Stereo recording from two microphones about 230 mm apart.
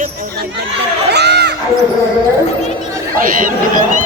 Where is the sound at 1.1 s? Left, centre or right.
Right.